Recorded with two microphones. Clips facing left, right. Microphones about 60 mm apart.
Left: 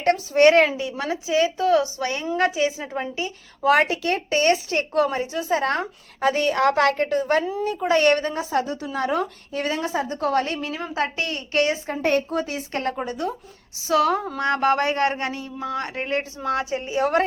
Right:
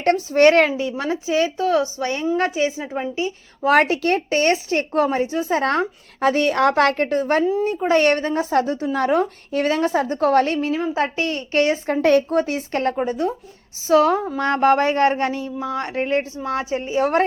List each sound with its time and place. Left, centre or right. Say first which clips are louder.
0.0 s a woman's voice: right 2 dB; right
3.2 s speech: left 1 dB; right
11.9 s speech: right 6 dB; right
12.3 s speech: right 5 dB; right
13.0 s a woman's voice: right 5 dB; centre
13.8 s a woman's voice: right 4 dB; right